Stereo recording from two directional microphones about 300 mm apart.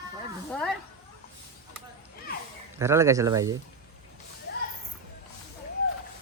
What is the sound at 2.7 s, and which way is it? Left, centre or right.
Speech, centre.